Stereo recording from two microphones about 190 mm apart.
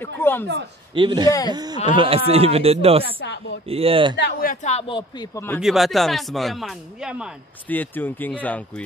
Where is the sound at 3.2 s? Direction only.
65° left (ahead or behind).